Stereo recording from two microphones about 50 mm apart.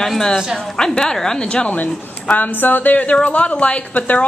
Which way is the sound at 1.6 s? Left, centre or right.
Left.